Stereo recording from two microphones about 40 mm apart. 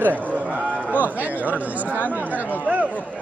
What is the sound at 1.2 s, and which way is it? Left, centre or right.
Speech, right.